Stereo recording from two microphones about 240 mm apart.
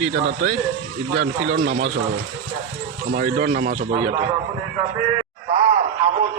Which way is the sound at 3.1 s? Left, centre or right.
Right.